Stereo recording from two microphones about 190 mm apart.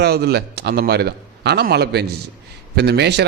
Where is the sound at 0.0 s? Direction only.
60° right (ahead or behind).